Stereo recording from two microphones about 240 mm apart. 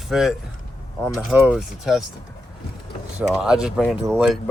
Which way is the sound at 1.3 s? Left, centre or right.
Centre.